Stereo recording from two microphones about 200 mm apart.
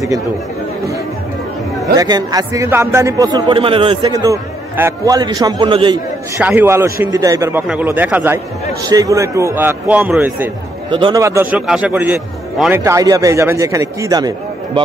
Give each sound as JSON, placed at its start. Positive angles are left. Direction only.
{"t": 2.0, "sound": "a man's voice", "side_deg": -20}
{"t": 6.3, "sound": "a man's voice", "side_deg": -10}
{"t": 10.9, "sound": "a man's voice", "side_deg": -25}